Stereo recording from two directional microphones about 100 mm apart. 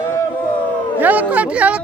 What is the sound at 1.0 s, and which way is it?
Speech, 15° right (ahead or behind).